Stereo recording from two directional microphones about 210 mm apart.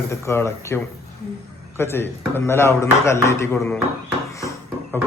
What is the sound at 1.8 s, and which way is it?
A man's voice, 10° left (ahead or behind).